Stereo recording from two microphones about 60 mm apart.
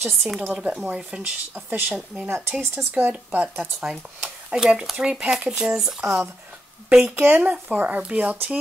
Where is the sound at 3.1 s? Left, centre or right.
Centre.